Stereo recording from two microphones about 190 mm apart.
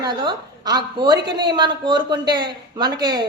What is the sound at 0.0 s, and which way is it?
Speech, 20° right (ahead or behind).